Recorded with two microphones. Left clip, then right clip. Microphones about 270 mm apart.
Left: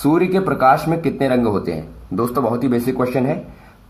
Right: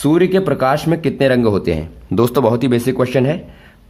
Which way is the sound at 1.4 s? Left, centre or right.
Right.